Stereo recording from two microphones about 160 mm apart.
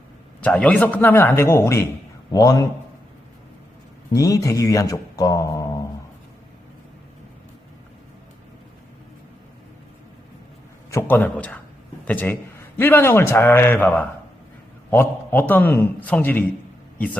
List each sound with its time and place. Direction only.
0.4 s a man's voice: 10° left (ahead or behind)
4.1 s a man's voice: 20° left (ahead or behind)
10.9 s a man's voice: 10° left (ahead or behind)